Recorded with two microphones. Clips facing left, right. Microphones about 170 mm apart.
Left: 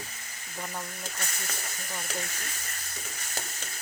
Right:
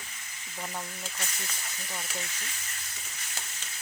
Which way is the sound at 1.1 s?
50° left (ahead or behind).